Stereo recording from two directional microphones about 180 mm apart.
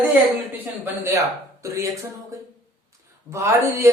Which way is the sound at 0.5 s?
10° right (ahead or behind).